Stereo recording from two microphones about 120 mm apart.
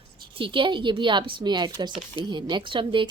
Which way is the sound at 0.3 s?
45° right (ahead or behind).